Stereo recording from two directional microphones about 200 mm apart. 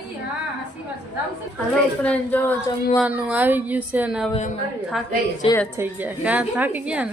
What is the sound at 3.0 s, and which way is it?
A woman's voice, 5° right (ahead or behind).